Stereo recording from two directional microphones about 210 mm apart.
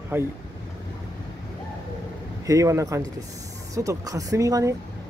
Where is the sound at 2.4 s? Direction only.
15° right (ahead or behind).